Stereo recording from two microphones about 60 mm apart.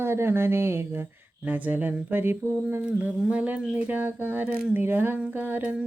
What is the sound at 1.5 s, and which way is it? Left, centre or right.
A woman's voice, right.